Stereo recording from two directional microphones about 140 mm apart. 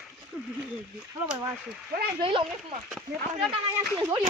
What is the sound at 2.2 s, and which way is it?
Speech, 40° right (ahead or behind).